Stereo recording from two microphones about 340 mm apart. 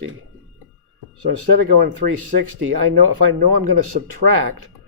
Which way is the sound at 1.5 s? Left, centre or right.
Right.